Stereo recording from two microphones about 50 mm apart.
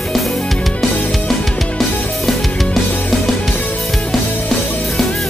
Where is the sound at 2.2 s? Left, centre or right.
Centre.